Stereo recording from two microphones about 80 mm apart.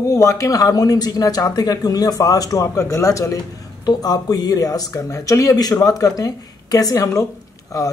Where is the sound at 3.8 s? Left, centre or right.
Left.